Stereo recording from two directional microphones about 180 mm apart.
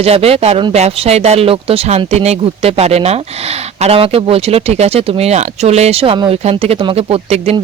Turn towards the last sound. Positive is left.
turn(degrees=-35)  # may be behind; listen again after turning